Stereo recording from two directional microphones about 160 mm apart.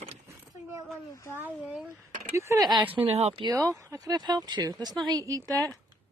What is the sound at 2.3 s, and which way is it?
Speech, 20° right (ahead or behind).